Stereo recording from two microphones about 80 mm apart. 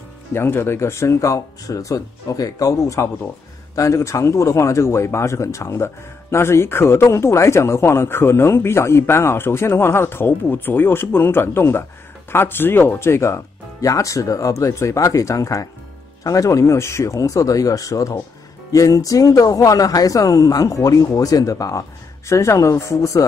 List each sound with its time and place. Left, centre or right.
0.3 s speech: left